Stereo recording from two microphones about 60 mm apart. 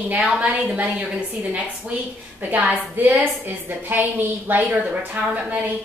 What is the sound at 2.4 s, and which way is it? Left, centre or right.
A woman's voice, right.